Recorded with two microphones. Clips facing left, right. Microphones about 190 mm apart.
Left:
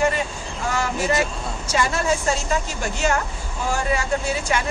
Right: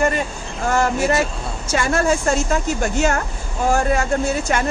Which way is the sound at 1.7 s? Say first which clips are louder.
Right 4 dB; 55° right (ahead or behind).